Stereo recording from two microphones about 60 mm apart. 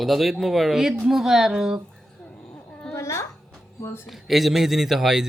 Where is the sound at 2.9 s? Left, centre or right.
Left.